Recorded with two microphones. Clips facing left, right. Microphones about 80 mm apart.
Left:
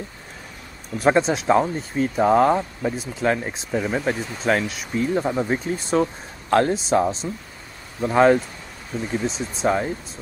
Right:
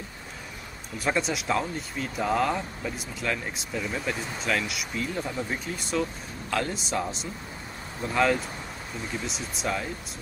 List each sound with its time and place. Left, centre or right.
0.9 s speech: left